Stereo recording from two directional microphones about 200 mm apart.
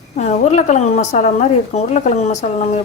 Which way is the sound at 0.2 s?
35° left (ahead or behind).